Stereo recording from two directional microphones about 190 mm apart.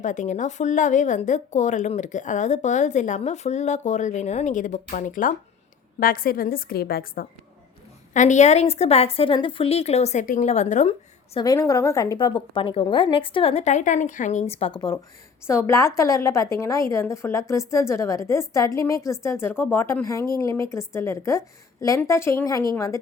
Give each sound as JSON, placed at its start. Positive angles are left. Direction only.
{"t": 0.0, "sound": "a woman's voice", "side_deg": 40}
{"t": 8.1, "sound": "speech", "side_deg": 40}
{"t": 11.3, "sound": "a woman's voice", "side_deg": 20}
{"t": 14.5, "sound": "a woman's voice", "side_deg": 30}